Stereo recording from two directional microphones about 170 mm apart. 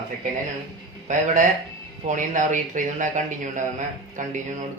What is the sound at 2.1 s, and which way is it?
Speech, 50° right (ahead or behind).